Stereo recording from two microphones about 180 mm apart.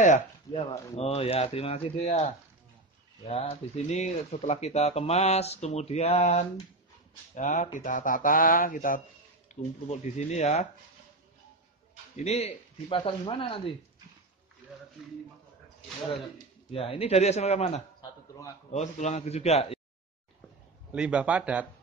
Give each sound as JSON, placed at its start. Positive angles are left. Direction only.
{"t": 0.0, "sound": "a sound", "side_deg": 45}
{"t": 0.6, "sound": "speech", "side_deg": 35}
{"t": 9.5, "sound": "a sound", "side_deg": 40}
{"t": 9.8, "sound": "speech", "side_deg": 40}
{"t": 12.2, "sound": "speech", "side_deg": 35}
{"t": 16.7, "sound": "speech", "side_deg": 30}
{"t": 20.9, "sound": "a man's voice", "side_deg": -5}